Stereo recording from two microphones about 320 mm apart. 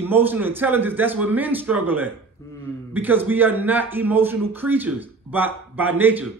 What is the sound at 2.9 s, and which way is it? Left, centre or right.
A man's voice, centre.